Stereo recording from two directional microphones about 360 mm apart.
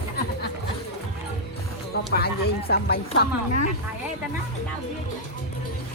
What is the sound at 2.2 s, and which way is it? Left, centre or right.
Speech, left.